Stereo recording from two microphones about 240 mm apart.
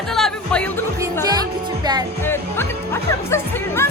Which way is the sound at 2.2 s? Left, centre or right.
Centre.